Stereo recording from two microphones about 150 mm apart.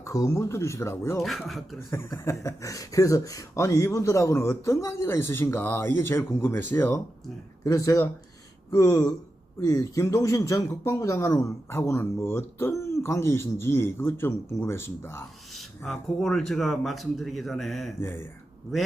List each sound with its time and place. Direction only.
0.0 s speech: 20° left (ahead or behind)
1.2 s speech: centre (ahead or behind)
1.9 s speech: 20° left (ahead or behind)
15.5 s speech: centre (ahead or behind)
18.0 s speech: 15° left (ahead or behind)